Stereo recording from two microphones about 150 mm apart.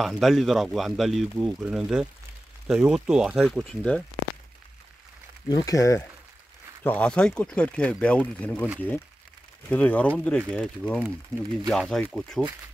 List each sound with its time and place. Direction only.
0.0 s speech: centre (ahead or behind)
5.5 s speech: 20° left (ahead or behind)
6.8 s speech: 10° left (ahead or behind)